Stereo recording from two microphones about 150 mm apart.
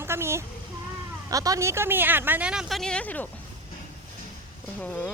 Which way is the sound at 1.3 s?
25° right (ahead or behind).